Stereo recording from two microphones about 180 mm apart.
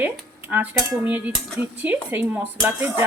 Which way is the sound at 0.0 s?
10° right (ahead or behind).